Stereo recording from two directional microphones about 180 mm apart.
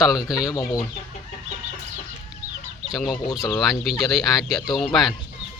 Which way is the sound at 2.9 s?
Centre (ahead or behind).